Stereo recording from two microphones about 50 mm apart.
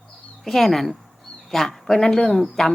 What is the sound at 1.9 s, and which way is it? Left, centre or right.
Speech, centre.